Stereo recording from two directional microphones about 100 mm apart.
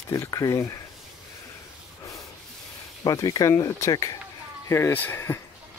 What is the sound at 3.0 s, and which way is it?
Speech, 35° left (ahead or behind).